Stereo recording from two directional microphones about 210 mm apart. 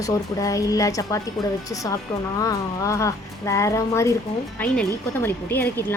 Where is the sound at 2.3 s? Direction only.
15° left (ahead or behind).